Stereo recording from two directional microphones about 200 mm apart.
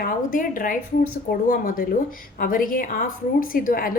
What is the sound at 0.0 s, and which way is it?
A woman's voice, 45° left (ahead or behind).